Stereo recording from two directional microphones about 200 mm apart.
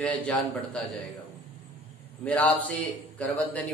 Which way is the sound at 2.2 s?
5° left (ahead or behind).